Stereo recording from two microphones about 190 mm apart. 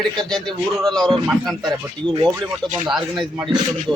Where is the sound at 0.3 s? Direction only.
Centre (ahead or behind).